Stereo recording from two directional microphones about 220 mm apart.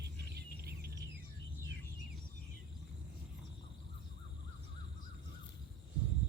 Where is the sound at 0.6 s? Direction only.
45° right (ahead or behind).